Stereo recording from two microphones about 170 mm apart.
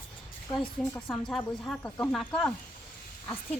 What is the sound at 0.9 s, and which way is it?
Speech, 10° left (ahead or behind).